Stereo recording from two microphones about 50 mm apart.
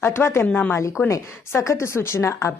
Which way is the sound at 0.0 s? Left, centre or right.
Left.